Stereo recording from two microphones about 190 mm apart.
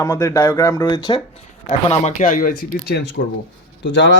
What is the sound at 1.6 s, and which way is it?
Speech, 40° left (ahead or behind).